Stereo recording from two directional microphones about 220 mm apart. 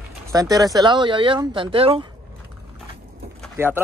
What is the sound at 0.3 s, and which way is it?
Speech, 15° right (ahead or behind).